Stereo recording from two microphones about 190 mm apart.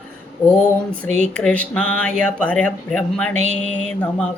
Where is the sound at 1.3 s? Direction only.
5° left (ahead or behind).